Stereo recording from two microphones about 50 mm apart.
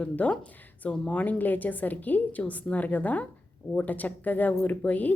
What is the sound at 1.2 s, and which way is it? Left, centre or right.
A woman's voice, left.